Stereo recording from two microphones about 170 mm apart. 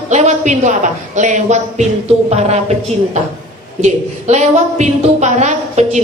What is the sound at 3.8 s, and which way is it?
A woman's voice, 45° right (ahead or behind).